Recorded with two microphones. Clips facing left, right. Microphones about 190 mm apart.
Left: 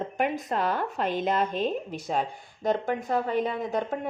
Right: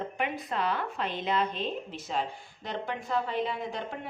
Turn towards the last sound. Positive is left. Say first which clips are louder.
# left 7 dB
turn(degrees=45)  # may be behind; listen again after turning